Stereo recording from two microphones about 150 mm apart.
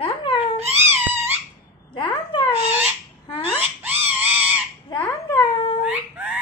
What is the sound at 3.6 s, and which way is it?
Screaming, 10° right (ahead or behind).